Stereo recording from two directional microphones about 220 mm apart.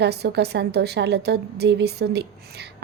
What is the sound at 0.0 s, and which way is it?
A woman's voice, 50° right (ahead or behind).